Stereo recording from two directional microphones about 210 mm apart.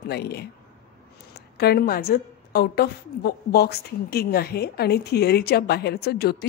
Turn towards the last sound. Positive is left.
turn(degrees=50)  # may be behind; listen again after turning